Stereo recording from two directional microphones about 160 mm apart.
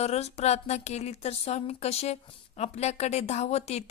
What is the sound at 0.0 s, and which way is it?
A woman's voice, 40° left (ahead or behind).